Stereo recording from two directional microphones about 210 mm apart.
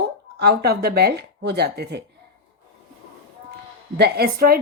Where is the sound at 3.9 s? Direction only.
50° right (ahead or behind).